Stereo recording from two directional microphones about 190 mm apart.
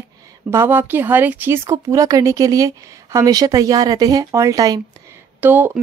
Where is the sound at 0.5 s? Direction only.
10° right (ahead or behind).